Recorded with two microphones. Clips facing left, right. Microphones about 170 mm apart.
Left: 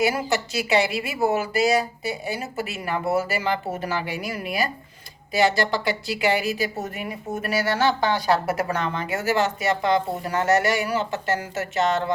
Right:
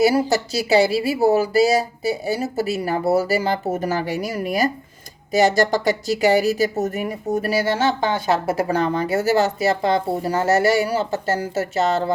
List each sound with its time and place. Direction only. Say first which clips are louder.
0.0 s speech: right 6 dB; 35° right (ahead or behind)